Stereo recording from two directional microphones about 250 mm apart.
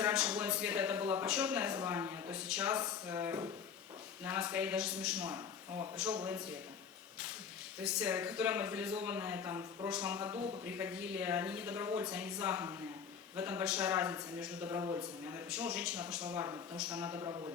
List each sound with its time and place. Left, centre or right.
0.0 s a man's voice: centre
7.8 s a man's voice: centre
10.3 s speech: right
10.7 s a man's voice: centre